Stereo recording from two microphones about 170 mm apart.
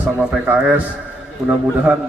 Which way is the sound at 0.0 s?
5° right (ahead or behind).